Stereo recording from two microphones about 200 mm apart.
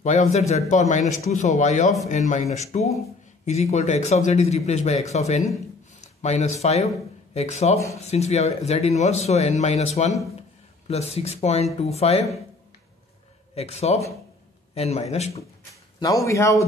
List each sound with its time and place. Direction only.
0.0 s speech: 35° left (ahead or behind)
13.6 s speech: 30° left (ahead or behind)
15.7 s a man's voice: 15° left (ahead or behind)